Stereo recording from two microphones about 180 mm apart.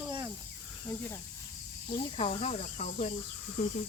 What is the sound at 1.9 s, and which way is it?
Speech, 30° left (ahead or behind).